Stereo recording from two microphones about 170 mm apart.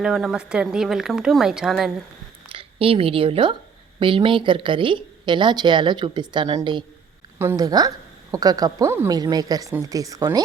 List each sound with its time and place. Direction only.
0.0 s a woman's voice: centre (ahead or behind)
2.5 s a woman's voice: 35° right (ahead or behind)